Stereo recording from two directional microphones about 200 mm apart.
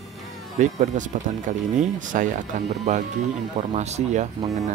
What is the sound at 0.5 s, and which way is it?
Speech, 40° right (ahead or behind).